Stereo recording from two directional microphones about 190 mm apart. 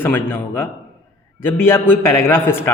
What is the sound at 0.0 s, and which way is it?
A man's voice, 10° left (ahead or behind).